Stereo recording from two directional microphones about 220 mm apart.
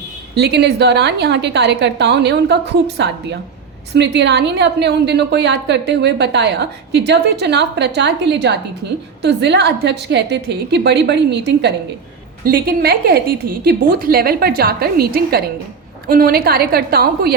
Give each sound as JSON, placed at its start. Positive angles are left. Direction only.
{"t": 0.3, "sound": "a woman's voice", "side_deg": -50}